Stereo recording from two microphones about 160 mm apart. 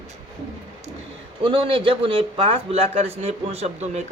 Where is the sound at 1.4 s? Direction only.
35° right (ahead or behind).